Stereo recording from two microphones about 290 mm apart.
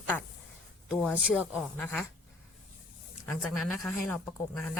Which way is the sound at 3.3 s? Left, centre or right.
Centre.